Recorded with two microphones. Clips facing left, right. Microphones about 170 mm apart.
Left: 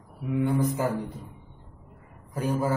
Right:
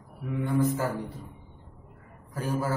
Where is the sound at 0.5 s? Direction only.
15° left (ahead or behind).